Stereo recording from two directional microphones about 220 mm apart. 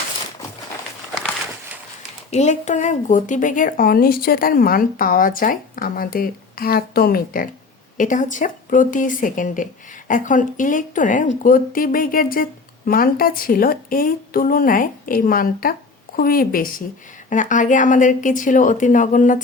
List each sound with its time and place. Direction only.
2.3 s speech: 30° left (ahead or behind)